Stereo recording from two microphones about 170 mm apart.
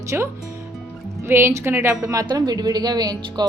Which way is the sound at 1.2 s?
15° right (ahead or behind).